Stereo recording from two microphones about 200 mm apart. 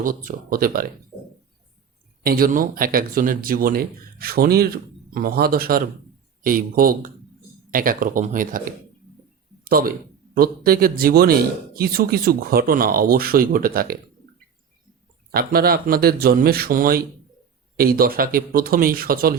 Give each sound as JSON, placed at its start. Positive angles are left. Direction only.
{"t": 0.0, "sound": "speech", "side_deg": -45}
{"t": 2.2, "sound": "speech", "side_deg": -45}
{"t": 15.3, "sound": "speech", "side_deg": -50}